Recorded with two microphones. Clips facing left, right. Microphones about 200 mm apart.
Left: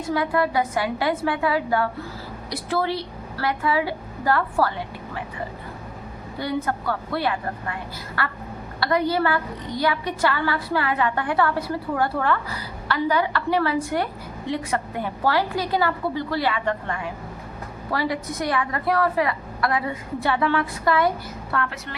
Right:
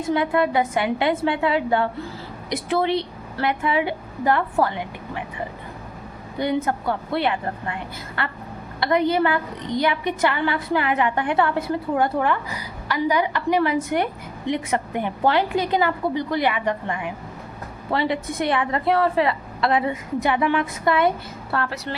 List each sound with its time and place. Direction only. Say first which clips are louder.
0.1 s a woman's voice: right 2 dB; 20° right (ahead or behind)
6.4 s a woman's voice: right 3 dB; 20° right (ahead or behind)
21.5 s a woman's voice: right 2 dB; 30° right (ahead or behind)